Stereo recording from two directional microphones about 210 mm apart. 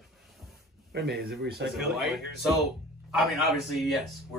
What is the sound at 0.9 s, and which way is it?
Speech, 50° right (ahead or behind).